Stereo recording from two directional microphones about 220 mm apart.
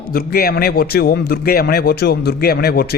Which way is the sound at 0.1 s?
40° left (ahead or behind).